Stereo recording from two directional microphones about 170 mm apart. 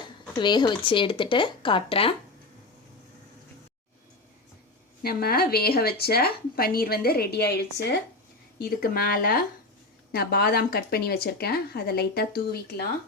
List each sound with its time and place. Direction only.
0.3 s speech: 25° left (ahead or behind)
5.0 s speech: 65° left (ahead or behind)
8.5 s speech: 60° left (ahead or behind)